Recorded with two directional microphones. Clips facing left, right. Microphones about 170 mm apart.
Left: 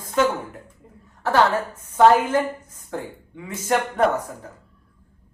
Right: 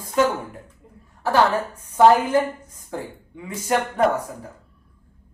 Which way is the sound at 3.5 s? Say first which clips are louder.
Even; 10° right (ahead or behind).